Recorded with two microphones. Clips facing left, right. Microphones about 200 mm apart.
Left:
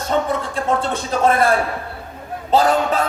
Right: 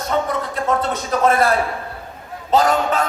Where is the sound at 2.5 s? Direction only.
30° left (ahead or behind).